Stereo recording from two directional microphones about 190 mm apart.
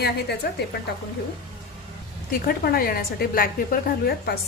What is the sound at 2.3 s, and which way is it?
A woman's voice, 50° left (ahead or behind).